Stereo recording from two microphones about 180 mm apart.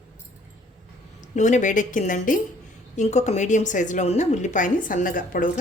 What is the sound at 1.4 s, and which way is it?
A woman's voice, 40° left (ahead or behind).